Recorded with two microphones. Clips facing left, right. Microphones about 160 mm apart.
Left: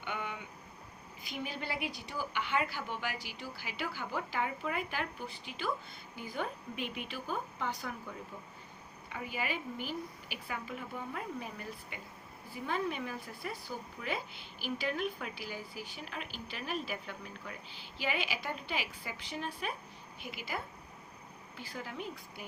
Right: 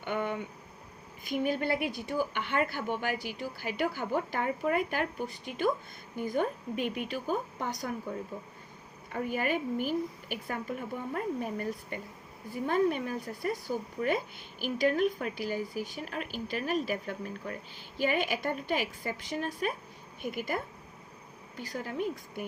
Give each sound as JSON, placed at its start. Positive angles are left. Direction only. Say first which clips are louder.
{"t": 0.0, "sound": "a sound", "louder": "right 8 dB", "side_deg": -50}
{"t": 1.2, "sound": "a woman's voice", "louder": "right 11 dB", "side_deg": -50}
{"t": 9.0, "sound": "a woman's voice", "louder": "right 7 dB", "side_deg": -50}